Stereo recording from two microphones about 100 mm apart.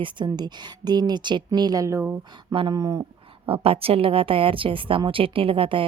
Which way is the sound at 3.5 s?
70° right (ahead or behind).